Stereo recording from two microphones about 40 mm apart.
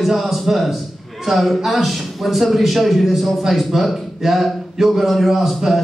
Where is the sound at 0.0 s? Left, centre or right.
Centre.